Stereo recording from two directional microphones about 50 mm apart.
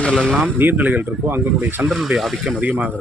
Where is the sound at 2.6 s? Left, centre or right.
Right.